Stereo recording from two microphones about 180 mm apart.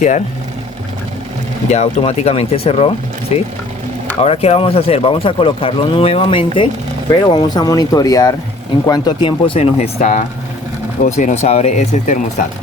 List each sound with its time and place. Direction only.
1.7 s speech: 35° left (ahead or behind)